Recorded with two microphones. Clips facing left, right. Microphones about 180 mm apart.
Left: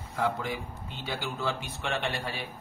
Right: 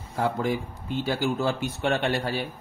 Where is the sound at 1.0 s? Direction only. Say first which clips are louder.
Right 7 dB; 45° right (ahead or behind).